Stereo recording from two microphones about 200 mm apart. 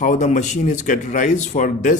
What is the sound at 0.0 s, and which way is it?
Speech, 35° left (ahead or behind).